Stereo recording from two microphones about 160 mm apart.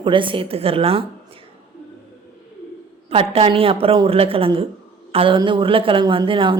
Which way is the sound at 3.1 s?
35° right (ahead or behind).